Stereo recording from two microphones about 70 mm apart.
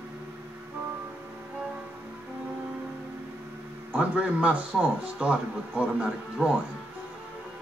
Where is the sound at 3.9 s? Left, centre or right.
Centre.